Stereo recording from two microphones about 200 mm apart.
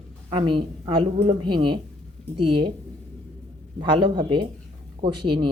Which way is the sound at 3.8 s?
25° right (ahead or behind).